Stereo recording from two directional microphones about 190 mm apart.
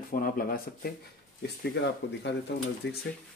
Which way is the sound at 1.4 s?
60° left (ahead or behind).